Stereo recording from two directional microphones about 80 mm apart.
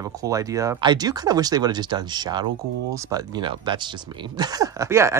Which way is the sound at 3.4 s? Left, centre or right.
Right.